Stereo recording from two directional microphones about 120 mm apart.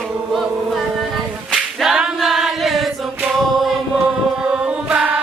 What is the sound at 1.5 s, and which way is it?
Choir, 5° right (ahead or behind).